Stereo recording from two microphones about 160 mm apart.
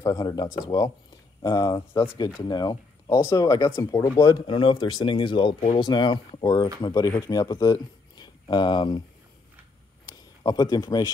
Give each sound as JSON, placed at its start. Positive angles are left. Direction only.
{"t": 0.0, "sound": "speech", "side_deg": 25}
{"t": 10.4, "sound": "speech", "side_deg": 25}